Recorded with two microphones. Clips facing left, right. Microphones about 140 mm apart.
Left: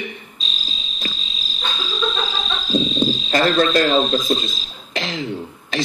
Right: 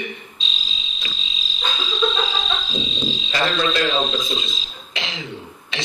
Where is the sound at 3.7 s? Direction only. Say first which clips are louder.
Left 5 dB; 45° left (ahead or behind).